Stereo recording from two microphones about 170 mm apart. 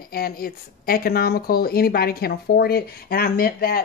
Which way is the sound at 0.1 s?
60° left (ahead or behind).